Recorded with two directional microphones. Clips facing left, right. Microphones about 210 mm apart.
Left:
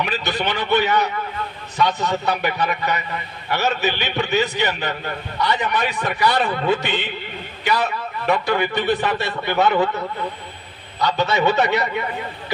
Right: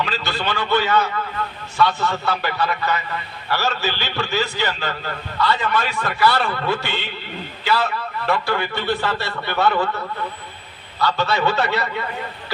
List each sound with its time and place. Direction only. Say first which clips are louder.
0.0 s a man's voice: left 1 dB; 20° left (ahead or behind)
11.0 s a man's voice: left 1 dB; 15° left (ahead or behind)